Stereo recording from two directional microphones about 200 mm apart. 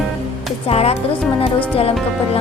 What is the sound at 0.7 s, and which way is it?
Speech, 30° left (ahead or behind).